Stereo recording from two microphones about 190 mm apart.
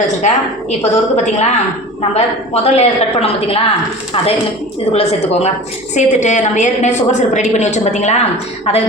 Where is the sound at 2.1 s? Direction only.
35° left (ahead or behind).